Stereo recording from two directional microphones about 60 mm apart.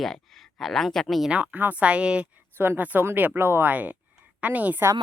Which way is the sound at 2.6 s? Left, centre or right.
Right.